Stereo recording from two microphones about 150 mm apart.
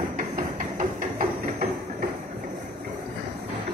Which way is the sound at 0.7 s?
60° right (ahead or behind).